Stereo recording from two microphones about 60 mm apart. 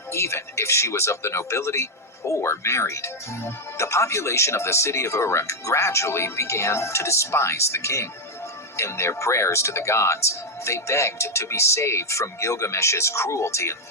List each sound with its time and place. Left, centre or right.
0.1 s speech: left